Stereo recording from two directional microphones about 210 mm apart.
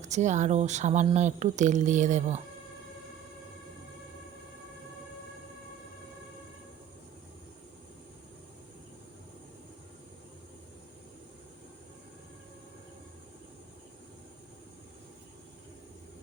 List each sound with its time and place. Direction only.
0.0 s speech: 35° right (ahead or behind)